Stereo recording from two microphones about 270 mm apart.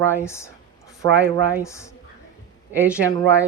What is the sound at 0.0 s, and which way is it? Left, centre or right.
Speech, centre.